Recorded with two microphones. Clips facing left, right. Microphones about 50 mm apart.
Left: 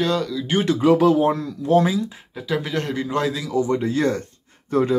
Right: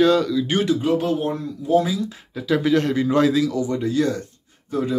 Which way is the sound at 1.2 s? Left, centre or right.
Left.